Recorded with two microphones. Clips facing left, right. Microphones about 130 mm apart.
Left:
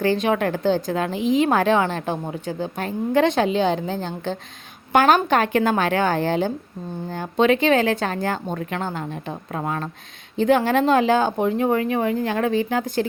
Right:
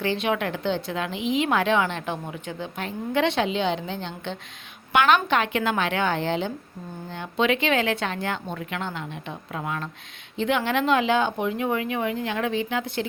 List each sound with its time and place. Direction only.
0.0 s a woman's voice: 40° left (ahead or behind)